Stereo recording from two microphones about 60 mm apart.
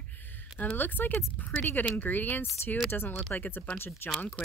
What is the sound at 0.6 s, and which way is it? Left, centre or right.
Speech, left.